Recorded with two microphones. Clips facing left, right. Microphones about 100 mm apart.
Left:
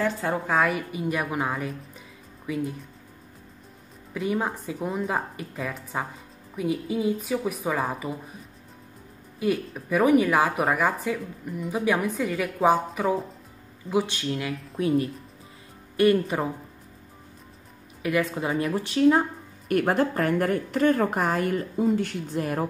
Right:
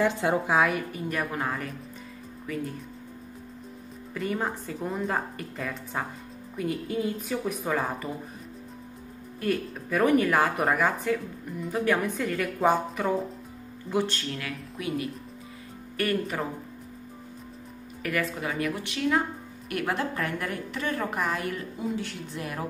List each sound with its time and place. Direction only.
0.0 s a woman's voice: 20° right (ahead or behind)
0.5 s a woman's voice: centre (ahead or behind)
4.1 s a woman's voice: 5° left (ahead or behind)
9.4 s a woman's voice: 10° left (ahead or behind)
14.5 s a woman's voice: 35° left (ahead or behind)
16.0 s speech: 20° left (ahead or behind)
18.0 s a woman's voice: 20° left (ahead or behind); by 22.7 s 40° left (ahead or behind)